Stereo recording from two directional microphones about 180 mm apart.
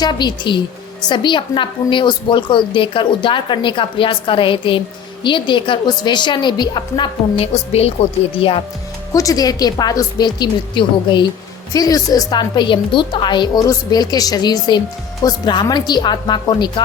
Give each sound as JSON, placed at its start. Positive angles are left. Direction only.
{"t": 0.0, "sound": "a woman's voice", "side_deg": 25}
{"t": 9.1, "sound": "a woman's voice", "side_deg": 20}